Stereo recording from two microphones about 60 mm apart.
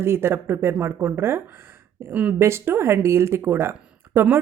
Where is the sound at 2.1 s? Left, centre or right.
Right.